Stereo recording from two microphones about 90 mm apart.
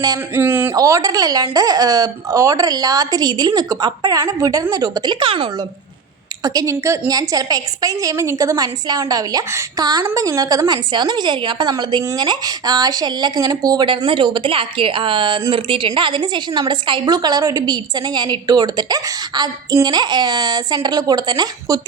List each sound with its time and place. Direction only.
0.3 s speech: 25° right (ahead or behind)
0.8 s a woman's voice: 40° right (ahead or behind)
5.2 s speech: 75° right (ahead or behind)
6.4 s a woman's voice: 45° right (ahead or behind)
13.8 s a woman's voice: 65° right (ahead or behind); by 21.8 s 50° right (ahead or behind)